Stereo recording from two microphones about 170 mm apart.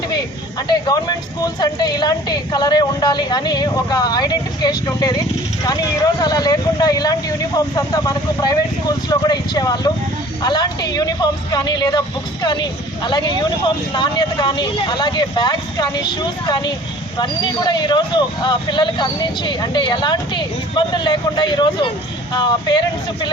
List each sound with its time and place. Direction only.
0.7 s speech: 25° left (ahead or behind)